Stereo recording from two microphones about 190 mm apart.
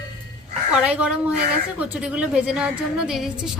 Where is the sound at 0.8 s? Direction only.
5° right (ahead or behind).